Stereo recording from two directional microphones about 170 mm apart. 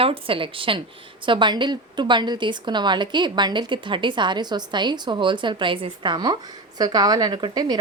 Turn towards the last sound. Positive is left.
turn(degrees=-25)  # may be behind; listen again after turning